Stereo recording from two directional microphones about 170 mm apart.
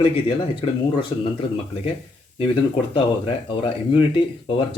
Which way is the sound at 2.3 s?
30° left (ahead or behind).